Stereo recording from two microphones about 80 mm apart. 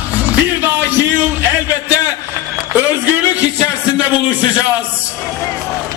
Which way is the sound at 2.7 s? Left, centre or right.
Right.